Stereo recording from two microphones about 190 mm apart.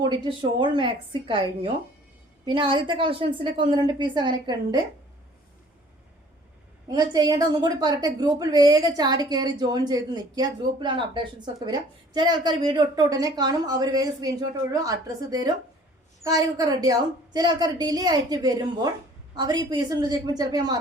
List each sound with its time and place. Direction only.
0.0 s a woman's voice: 25° right (ahead or behind)
6.8 s a woman's voice: 20° right (ahead or behind)